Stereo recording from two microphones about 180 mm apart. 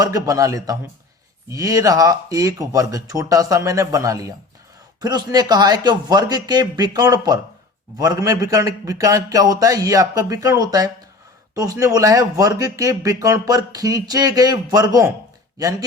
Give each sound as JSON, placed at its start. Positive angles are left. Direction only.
{"t": 0.0, "sound": "speech", "side_deg": -20}